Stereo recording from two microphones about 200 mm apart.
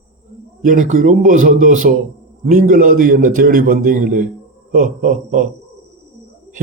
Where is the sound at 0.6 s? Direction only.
40° right (ahead or behind).